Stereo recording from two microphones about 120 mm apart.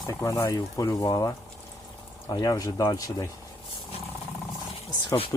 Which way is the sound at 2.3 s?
30° left (ahead or behind).